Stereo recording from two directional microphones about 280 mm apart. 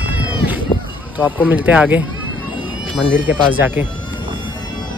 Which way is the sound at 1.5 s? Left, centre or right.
Centre.